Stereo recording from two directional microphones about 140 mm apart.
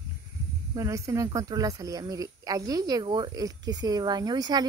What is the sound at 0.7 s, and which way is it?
Speech, 25° right (ahead or behind).